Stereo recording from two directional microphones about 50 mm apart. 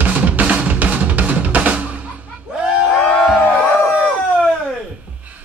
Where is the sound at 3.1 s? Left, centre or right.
Centre.